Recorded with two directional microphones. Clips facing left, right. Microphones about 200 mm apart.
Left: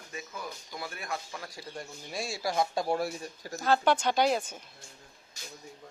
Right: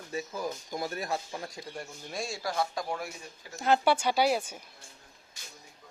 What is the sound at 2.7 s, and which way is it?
Speech, 30° left (ahead or behind).